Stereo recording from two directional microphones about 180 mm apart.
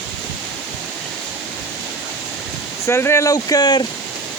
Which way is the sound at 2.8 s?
15° left (ahead or behind).